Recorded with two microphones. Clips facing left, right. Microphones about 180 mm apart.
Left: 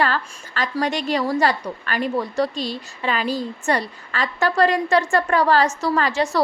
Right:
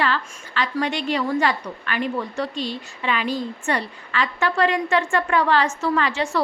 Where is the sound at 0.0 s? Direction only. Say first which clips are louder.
Left 2 dB; 40° left (ahead or behind).